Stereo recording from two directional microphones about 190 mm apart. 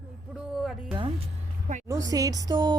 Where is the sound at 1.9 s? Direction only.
20° right (ahead or behind).